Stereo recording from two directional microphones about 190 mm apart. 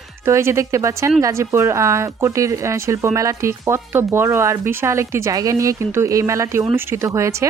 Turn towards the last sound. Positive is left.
turn(degrees=-15)  # may be behind; listen again after turning